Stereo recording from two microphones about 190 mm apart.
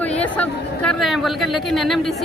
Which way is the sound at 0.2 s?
5° left (ahead or behind).